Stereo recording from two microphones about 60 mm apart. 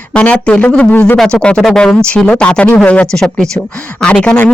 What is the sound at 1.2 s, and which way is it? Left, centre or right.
Speech, centre.